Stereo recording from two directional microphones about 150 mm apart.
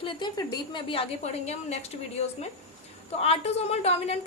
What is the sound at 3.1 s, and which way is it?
A woman's voice, 45° left (ahead or behind).